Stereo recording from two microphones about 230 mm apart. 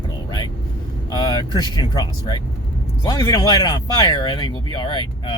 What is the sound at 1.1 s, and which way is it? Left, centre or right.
Vehicle, centre.